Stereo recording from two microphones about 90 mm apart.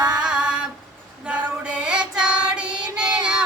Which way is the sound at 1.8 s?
10° right (ahead or behind).